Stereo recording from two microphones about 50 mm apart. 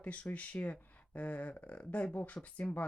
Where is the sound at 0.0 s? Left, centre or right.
Left.